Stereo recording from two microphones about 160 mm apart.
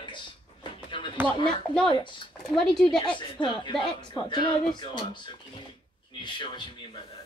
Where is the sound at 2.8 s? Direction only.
30° left (ahead or behind).